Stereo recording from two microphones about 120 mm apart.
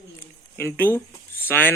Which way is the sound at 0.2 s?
20° left (ahead or behind).